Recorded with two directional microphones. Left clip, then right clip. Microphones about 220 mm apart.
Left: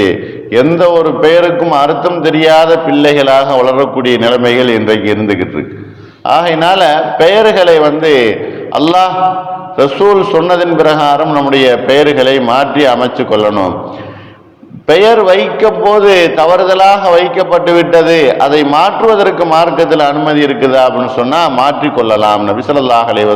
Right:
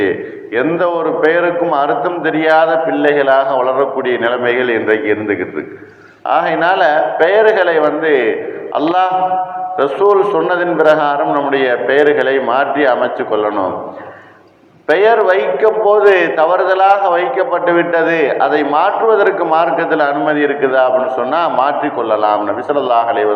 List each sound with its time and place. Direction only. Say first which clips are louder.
0.5 s a man's voice: left 7 dB; 45° left (ahead or behind)
14.8 s a man's voice: left 5 dB; 50° left (ahead or behind)